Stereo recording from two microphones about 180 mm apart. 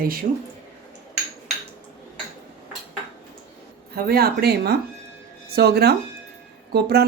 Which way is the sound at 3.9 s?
60° right (ahead or behind).